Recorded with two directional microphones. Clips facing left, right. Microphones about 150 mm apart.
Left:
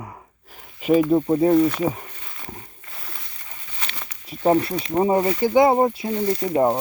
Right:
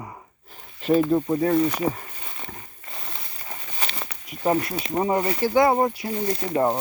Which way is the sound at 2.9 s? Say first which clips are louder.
Right 2 dB; 25° right (ahead or behind).